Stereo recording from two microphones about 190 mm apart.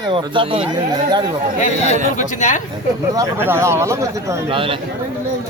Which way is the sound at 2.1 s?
40° left (ahead or behind).